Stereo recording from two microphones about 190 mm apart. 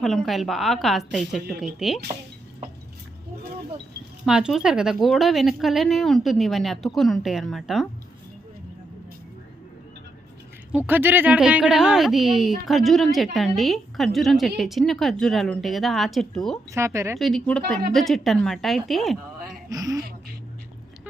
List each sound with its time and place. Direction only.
0.0 s a woman's voice: centre (ahead or behind)
4.3 s a woman's voice: 5° right (ahead or behind)
10.7 s a woman's voice: 10° right (ahead or behind)
16.7 s speech: 15° right (ahead or behind)
17.2 s a woman's voice: centre (ahead or behind)
19.7 s speech: 20° right (ahead or behind)